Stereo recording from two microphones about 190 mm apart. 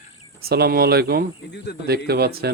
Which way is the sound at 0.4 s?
55° right (ahead or behind).